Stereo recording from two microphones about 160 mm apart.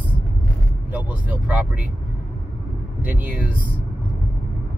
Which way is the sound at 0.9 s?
10° right (ahead or behind).